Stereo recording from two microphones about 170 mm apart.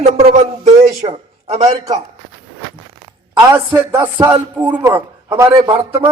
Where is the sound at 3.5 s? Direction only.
15° right (ahead or behind).